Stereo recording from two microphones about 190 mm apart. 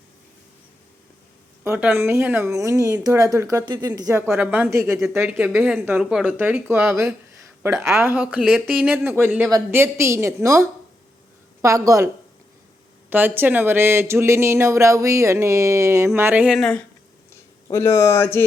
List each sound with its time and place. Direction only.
1.6 s speech: 15° right (ahead or behind)
9.0 s speech: 10° right (ahead or behind); by 16.8 s 5° left (ahead or behind)
17.7 s speech: 15° left (ahead or behind)